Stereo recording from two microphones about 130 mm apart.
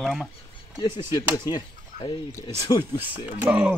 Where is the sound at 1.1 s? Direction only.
35° left (ahead or behind).